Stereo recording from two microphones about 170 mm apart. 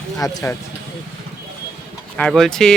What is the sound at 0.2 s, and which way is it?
Speech, 20° left (ahead or behind).